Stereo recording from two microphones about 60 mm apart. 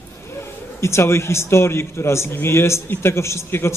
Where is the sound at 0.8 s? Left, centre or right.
Left.